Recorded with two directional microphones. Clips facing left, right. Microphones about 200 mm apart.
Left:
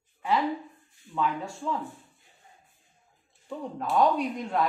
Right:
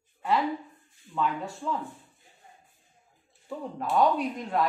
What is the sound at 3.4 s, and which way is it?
A woman's voice, centre (ahead or behind).